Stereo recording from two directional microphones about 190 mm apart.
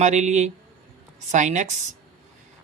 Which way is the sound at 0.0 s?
35° right (ahead or behind).